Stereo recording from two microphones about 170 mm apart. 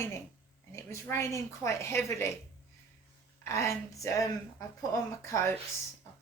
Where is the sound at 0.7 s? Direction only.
15° left (ahead or behind).